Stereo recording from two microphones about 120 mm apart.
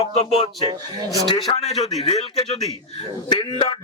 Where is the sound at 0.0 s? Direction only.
55° left (ahead or behind).